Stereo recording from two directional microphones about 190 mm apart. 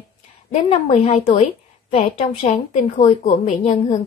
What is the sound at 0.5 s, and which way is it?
A woman's voice, 30° left (ahead or behind).